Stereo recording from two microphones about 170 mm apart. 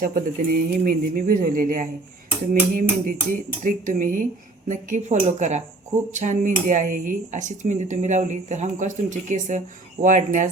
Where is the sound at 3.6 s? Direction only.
50° right (ahead or behind).